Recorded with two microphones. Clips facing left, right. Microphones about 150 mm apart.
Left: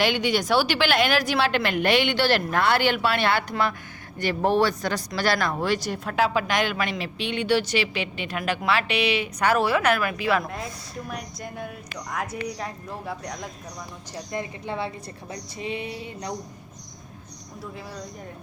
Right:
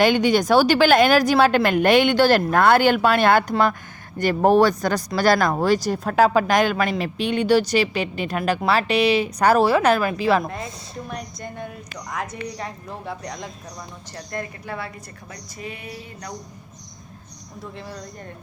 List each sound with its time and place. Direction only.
0.0 s a woman's voice: 45° right (ahead or behind)
11.1 s speech: 5° left (ahead or behind)
14.3 s a sound: 20° left (ahead or behind)